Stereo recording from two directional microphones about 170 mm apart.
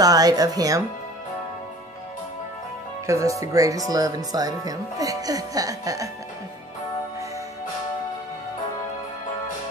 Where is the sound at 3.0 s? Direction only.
20° right (ahead or behind).